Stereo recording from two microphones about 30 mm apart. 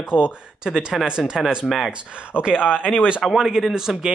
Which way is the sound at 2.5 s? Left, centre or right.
Left.